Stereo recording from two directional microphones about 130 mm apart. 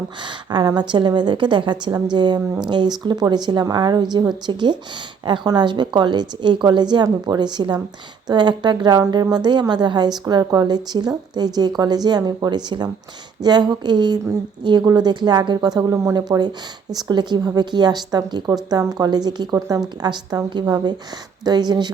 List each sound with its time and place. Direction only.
0.2 s a woman's voice: 35° right (ahead or behind)